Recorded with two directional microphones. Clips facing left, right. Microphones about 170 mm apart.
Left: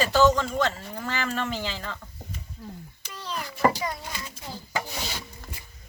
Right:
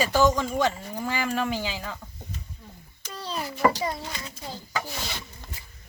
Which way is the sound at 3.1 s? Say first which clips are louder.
Right 2 dB; 30° right (ahead or behind).